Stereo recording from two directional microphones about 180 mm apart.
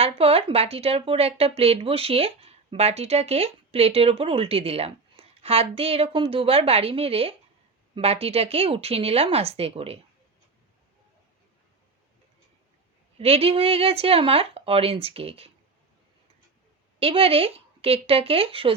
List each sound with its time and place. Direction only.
0.0 s speech: 35° right (ahead or behind)
13.1 s speech: 35° right (ahead or behind)
17.0 s speech: 30° right (ahead or behind)